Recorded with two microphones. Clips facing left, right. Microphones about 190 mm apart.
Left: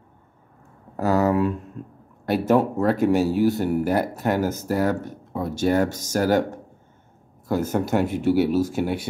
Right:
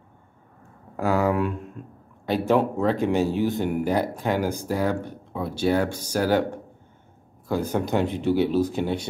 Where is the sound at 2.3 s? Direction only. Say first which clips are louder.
Left 2 dB; 10° left (ahead or behind).